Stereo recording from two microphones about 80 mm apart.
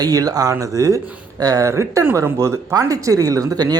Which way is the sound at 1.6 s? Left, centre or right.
Right.